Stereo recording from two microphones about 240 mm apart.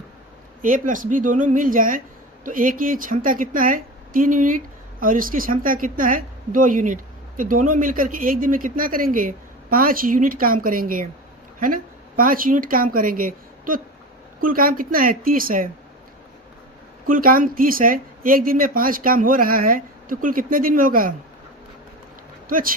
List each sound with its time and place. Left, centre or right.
0.6 s speech: right
17.1 s speech: right
22.4 s speech: right